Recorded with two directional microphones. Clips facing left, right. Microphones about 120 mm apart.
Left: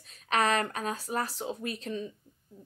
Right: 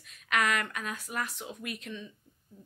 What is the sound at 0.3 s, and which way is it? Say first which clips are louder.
Speech: left 3 dB; 30° left (ahead or behind).